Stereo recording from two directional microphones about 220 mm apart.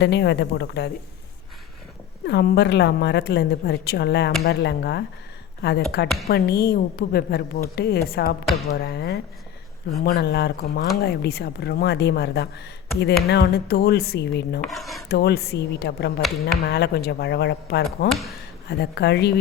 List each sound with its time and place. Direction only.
0.0 s speech: 50° left (ahead or behind)
2.2 s speech: 50° left (ahead or behind)
14.6 s cutlery: centre (ahead or behind)
15.1 s speech: 45° left (ahead or behind)